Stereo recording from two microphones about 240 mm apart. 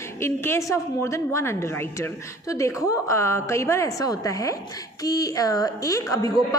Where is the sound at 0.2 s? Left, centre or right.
Centre.